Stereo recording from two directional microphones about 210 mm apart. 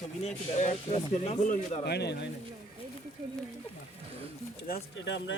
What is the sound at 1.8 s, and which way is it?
Speech, 50° left (ahead or behind).